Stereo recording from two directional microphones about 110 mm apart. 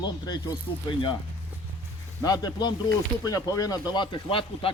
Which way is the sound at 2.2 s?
35° left (ahead or behind).